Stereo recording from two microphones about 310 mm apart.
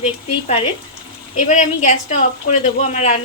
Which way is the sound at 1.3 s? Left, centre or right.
Left.